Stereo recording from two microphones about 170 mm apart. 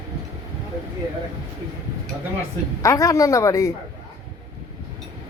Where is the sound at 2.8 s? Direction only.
20° left (ahead or behind).